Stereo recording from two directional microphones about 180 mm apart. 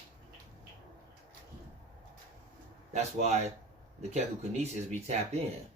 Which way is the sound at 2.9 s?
40° right (ahead or behind).